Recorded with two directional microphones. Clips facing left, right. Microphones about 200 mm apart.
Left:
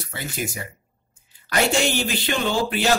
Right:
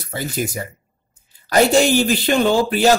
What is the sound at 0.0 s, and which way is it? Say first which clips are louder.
Speech: right 6 dB; 40° right (ahead or behind).